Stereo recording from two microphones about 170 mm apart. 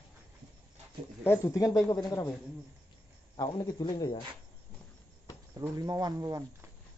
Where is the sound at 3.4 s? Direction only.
25° left (ahead or behind).